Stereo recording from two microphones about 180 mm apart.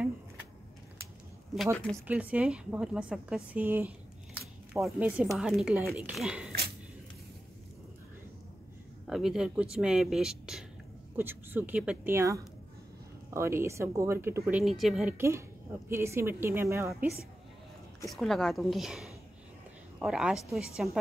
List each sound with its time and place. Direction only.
2.0 s a woman's voice: 10° right (ahead or behind)
9.0 s a woman's voice: centre (ahead or behind)
14.6 s speech: centre (ahead or behind)
15.1 s a woman's voice: 15° right (ahead or behind)
18.1 s speech: centre (ahead or behind)